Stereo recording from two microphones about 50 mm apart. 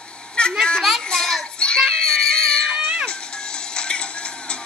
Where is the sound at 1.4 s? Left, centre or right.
Centre.